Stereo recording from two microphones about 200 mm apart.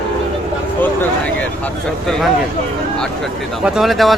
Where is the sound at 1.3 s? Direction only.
5° left (ahead or behind).